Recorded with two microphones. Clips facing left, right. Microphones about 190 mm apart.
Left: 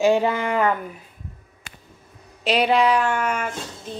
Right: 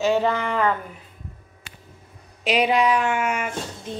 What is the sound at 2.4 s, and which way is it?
A woman's voice, 10° right (ahead or behind).